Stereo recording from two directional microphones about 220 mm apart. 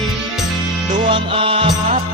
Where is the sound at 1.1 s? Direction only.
25° right (ahead or behind).